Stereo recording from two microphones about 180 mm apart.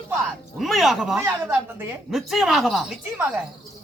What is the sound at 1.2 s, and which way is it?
Speech, 10° right (ahead or behind).